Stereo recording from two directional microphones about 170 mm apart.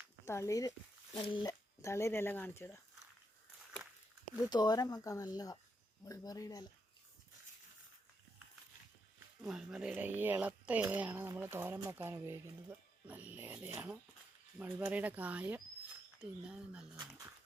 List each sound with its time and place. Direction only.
0.3 s speech: 15° left (ahead or behind)
1.1 s speech: 30° left (ahead or behind)
1.8 s speech: 15° left (ahead or behind)
4.4 s speech: 25° left (ahead or behind)
9.4 s speech: 5° right (ahead or behind)